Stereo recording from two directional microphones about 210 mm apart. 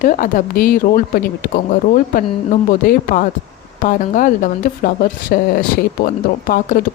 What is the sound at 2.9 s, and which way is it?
A woman's voice, 40° left (ahead or behind).